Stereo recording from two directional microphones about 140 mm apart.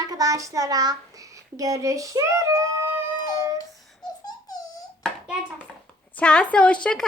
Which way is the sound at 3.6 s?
25° left (ahead or behind).